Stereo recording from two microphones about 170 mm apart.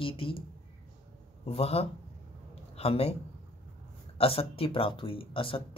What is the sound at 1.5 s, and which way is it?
A man's voice, 35° left (ahead or behind).